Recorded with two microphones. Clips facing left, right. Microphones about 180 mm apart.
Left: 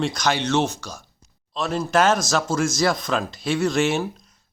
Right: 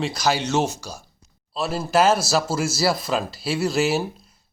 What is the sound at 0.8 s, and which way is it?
Speech, 10° right (ahead or behind).